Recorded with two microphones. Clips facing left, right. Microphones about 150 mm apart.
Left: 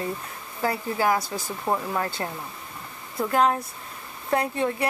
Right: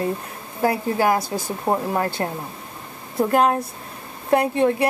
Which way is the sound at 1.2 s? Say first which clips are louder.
Right 5 dB; 30° right (ahead or behind).